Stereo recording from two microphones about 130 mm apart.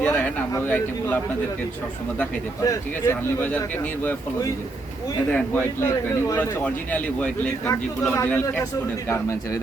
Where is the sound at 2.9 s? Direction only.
15° left (ahead or behind).